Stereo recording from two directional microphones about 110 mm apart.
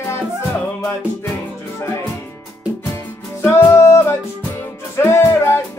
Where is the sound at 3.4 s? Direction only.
20° left (ahead or behind).